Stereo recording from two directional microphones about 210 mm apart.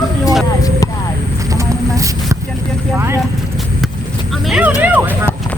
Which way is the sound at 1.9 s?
15° right (ahead or behind).